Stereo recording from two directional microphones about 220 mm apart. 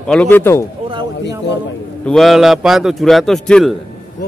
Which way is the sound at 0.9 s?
20° right (ahead or behind).